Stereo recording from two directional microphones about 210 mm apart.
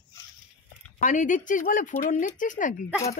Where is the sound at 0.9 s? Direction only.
35° left (ahead or behind).